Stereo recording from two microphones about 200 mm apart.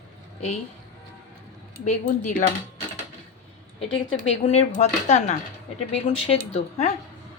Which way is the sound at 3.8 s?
25° left (ahead or behind).